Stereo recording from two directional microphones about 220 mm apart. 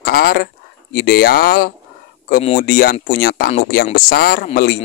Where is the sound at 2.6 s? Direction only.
40° left (ahead or behind).